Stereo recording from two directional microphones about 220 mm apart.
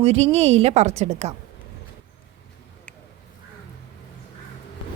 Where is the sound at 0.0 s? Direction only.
30° right (ahead or behind).